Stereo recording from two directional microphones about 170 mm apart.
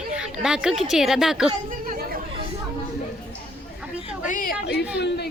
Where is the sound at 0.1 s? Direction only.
5° right (ahead or behind).